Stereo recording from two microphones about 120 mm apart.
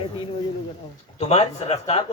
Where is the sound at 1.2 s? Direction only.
55° left (ahead or behind).